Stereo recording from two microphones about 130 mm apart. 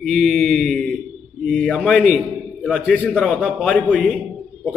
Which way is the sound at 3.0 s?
10° left (ahead or behind).